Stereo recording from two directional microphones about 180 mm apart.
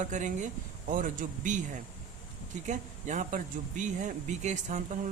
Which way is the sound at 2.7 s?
45° right (ahead or behind).